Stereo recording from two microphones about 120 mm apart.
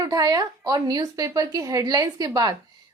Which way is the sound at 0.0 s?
30° right (ahead or behind).